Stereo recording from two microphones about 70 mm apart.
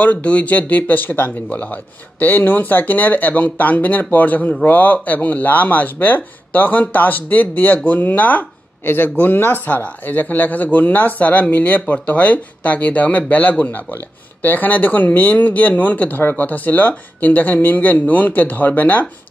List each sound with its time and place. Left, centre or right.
0.0 s speech: centre